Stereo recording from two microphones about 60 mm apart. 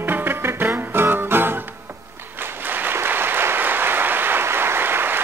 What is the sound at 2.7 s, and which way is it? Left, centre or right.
Applause, right.